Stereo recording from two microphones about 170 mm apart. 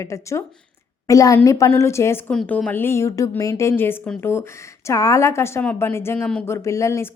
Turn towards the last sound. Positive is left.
turn(degrees=15)  # may be behind; listen again after turning